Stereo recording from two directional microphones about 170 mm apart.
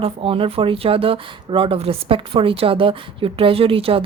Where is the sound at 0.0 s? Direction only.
35° right (ahead or behind).